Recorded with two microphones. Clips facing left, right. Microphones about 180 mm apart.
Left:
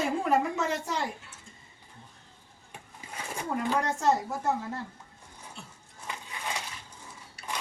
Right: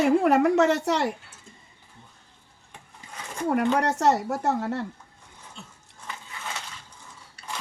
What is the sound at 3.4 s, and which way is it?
A woman's voice, 70° right (ahead or behind).